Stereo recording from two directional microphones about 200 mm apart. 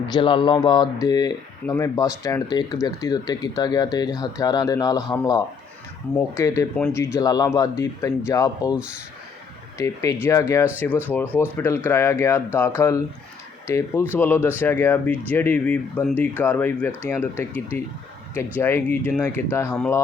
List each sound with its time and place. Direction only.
0.1 s speech: 25° left (ahead or behind)
6.7 s speech: 5° left (ahead or behind)
7.0 s speech: 15° left (ahead or behind)
8.7 s speech: 5° right (ahead or behind)
9.7 s speech: 15° left (ahead or behind)